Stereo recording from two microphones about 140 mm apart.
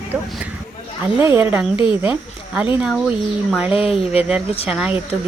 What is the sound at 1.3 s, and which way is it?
Speech, 15° right (ahead or behind).